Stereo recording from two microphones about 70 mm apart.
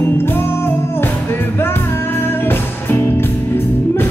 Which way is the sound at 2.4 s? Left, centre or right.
Left.